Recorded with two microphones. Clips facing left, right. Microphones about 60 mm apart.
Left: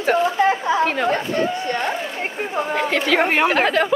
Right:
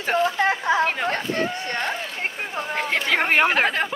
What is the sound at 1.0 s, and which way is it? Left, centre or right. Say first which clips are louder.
Speech: left 4 dB; left.